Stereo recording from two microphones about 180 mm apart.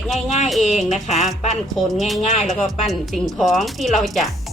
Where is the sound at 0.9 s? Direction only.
40° left (ahead or behind).